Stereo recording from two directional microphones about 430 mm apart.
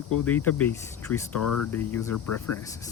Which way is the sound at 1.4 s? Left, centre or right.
Left.